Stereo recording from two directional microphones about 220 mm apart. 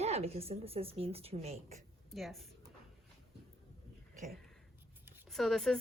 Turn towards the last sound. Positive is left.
turn(degrees=0)  # may be behind; listen again after turning